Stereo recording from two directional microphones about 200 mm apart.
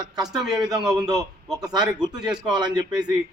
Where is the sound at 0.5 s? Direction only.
20° right (ahead or behind).